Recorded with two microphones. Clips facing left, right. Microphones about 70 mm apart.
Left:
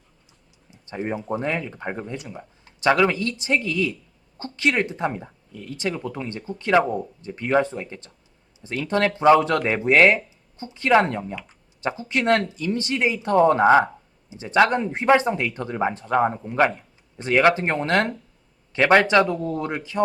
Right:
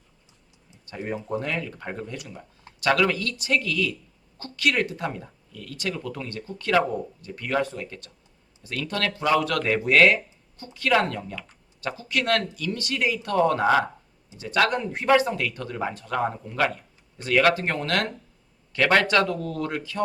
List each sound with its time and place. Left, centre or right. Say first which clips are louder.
0.7 s speech: left 3 dB; left